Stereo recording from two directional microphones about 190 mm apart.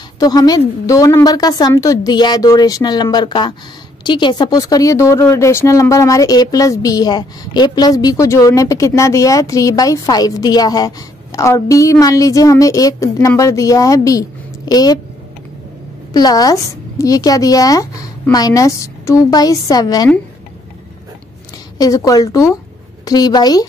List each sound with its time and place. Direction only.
0.2 s a woman's voice: 20° left (ahead or behind)
16.1 s a woman's voice: 20° left (ahead or behind)
21.7 s a woman's voice: 20° left (ahead or behind)